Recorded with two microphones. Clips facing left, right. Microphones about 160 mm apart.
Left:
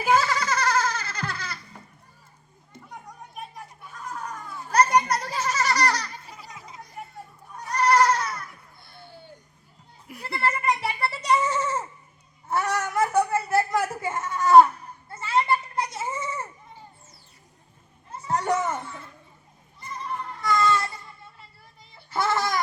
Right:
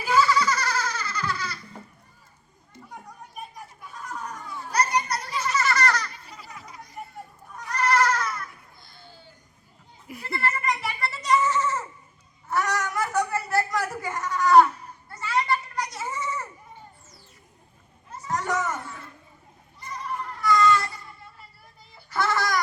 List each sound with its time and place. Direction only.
0.0 s goat: 55° left (ahead or behind)
4.7 s children playing: 50° left (ahead or behind); by 6.1 s 35° left (ahead or behind)
7.7 s goat: 30° left (ahead or behind)
8.8 s a sound: 65° left (ahead or behind)
10.2 s goat: 35° left (ahead or behind)
12.5 s a sound: 30° left (ahead or behind)
15.1 s goat: 25° left (ahead or behind)
18.3 s children playing: 30° left (ahead or behind)
20.4 s baby cry: 25° left (ahead or behind)
22.1 s a sound: 25° left (ahead or behind)